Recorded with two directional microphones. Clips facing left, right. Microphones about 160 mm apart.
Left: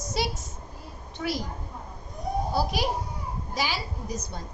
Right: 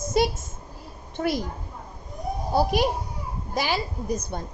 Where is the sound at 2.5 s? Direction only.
55° right (ahead or behind).